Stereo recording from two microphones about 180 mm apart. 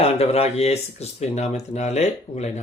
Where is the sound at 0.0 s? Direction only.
35° left (ahead or behind).